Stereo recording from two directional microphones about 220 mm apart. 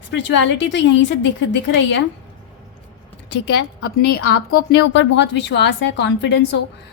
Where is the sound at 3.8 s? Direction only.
50° left (ahead or behind).